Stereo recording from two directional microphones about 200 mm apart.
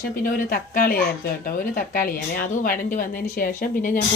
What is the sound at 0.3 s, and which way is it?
A woman's voice, 45° left (ahead or behind).